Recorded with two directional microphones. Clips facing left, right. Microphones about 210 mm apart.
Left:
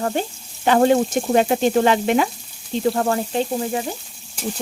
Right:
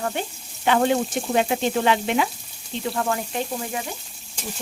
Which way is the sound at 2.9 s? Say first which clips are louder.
Left 5 dB; 35° left (ahead or behind).